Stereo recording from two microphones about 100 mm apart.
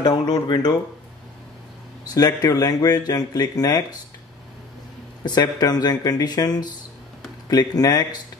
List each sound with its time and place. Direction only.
0.0 s speech: 45° left (ahead or behind)
2.0 s speech: 40° left (ahead or behind)
5.2 s speech: 45° left (ahead or behind)